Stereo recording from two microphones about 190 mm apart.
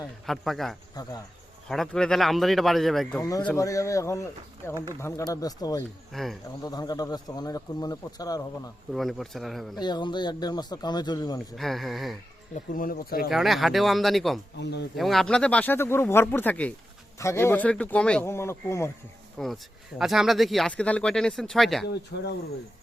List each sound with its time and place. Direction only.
0.3 s speech: centre (ahead or behind)
3.2 s speech: 20° left (ahead or behind)
6.1 s speech: centre (ahead or behind)
6.6 s speech: 20° left (ahead or behind)
8.9 s speech: centre (ahead or behind)
9.7 s speech: 20° left (ahead or behind)
11.5 s speech: centre (ahead or behind)
12.7 s speech: 50° left (ahead or behind)
13.3 s speech: centre (ahead or behind)
19.4 s speech: centre (ahead or behind)
22.1 s speech: 60° left (ahead or behind)